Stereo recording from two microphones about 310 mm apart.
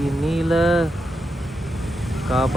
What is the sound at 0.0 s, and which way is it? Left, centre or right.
Vehicle, centre.